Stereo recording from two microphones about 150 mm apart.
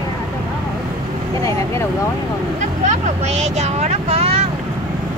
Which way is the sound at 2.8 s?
50° right (ahead or behind).